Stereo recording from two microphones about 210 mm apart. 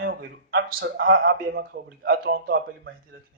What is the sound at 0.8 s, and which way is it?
A man's voice, 50° right (ahead or behind).